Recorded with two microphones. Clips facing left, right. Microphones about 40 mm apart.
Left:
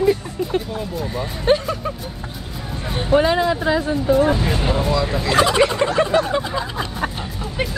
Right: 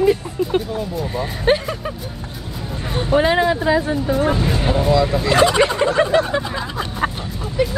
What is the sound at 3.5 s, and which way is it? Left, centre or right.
Speech, centre.